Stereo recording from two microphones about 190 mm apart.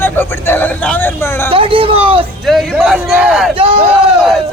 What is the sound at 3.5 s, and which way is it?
Speech, 30° right (ahead or behind).